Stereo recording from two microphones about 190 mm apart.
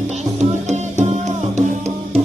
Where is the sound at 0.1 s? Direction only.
35° right (ahead or behind).